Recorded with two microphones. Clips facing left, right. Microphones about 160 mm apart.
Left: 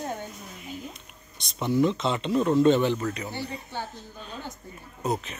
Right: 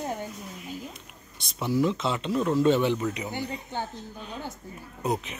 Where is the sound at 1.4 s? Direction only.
5° right (ahead or behind).